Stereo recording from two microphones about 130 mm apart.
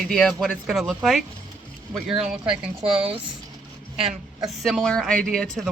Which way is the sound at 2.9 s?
45° right (ahead or behind).